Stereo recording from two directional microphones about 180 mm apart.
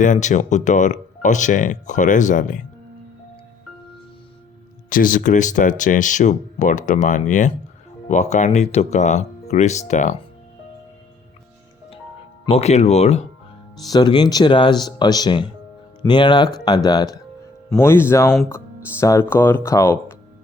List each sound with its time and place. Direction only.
0.0 s speech: 45° left (ahead or behind)
4.9 s speech: 50° left (ahead or behind)
12.5 s speech: 35° left (ahead or behind)
13.7 s speech: 25° left (ahead or behind)